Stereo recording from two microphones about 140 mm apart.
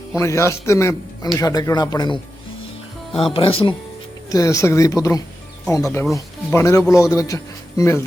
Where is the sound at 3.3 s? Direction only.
40° left (ahead or behind).